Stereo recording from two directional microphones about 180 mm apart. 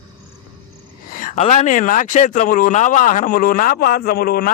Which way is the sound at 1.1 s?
45° left (ahead or behind).